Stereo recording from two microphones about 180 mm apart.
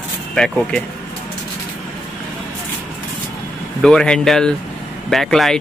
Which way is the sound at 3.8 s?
5° left (ahead or behind).